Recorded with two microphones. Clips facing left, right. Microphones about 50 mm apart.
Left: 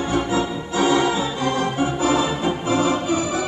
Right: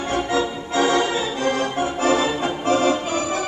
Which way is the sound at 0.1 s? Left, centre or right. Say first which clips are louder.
Right 1 dB; right.